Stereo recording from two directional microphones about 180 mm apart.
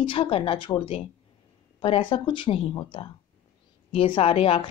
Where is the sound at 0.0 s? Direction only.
30° left (ahead or behind).